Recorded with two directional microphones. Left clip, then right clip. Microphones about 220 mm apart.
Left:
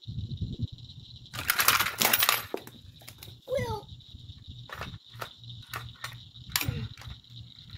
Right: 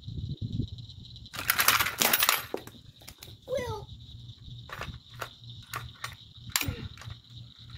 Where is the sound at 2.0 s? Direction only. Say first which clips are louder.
Even; 5° left (ahead or behind).